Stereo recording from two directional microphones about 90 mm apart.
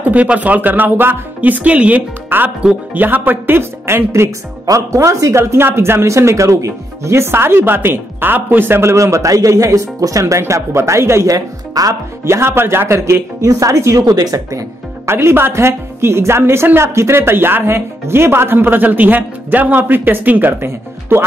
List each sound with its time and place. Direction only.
0.0 s a woman's voice: 15° right (ahead or behind); by 12.4 s 40° right (ahead or behind)
12.4 s speech: 25° right (ahead or behind); by 14.6 s 40° right (ahead or behind)
15.0 s a woman's voice: 30° right (ahead or behind)